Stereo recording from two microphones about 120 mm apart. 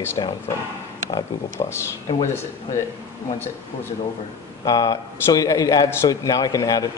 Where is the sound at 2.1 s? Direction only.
45° left (ahead or behind).